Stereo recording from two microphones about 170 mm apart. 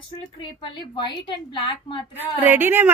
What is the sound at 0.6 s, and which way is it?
A woman's voice, 30° left (ahead or behind).